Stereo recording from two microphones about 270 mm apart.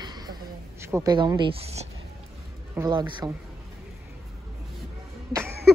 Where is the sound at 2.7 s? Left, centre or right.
Centre.